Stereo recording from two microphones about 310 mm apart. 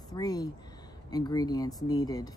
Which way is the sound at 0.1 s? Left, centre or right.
Centre.